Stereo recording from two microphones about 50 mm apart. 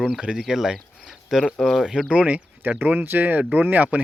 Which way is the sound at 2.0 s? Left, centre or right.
Right.